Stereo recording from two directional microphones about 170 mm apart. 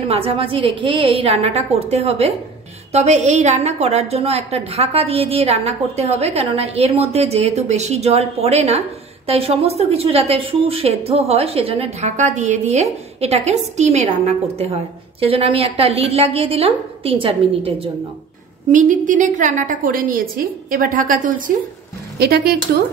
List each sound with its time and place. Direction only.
0.1 s a woman's voice: 35° right (ahead or behind)
18.7 s a woman's voice: 50° right (ahead or behind)
22.2 s speech: 70° right (ahead or behind)